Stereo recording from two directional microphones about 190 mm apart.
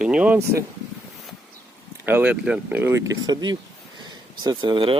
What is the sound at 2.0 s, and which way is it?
Speech, 10° right (ahead or behind).